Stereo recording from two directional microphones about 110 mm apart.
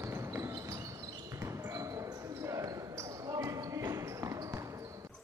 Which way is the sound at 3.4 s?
25° right (ahead or behind).